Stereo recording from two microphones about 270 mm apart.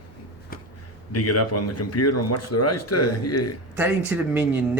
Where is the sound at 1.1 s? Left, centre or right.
Left.